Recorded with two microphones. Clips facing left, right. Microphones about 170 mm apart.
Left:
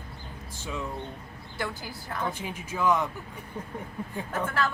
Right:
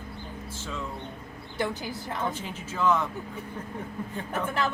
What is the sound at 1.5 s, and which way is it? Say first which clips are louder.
Speech: right 4 dB; 20° right (ahead or behind).